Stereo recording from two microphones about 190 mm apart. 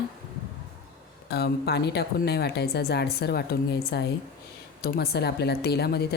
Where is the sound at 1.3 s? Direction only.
60° left (ahead or behind).